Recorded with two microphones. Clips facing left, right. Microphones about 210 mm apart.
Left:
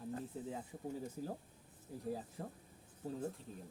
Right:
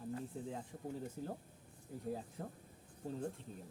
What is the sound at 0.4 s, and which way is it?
Speech, 5° left (ahead or behind).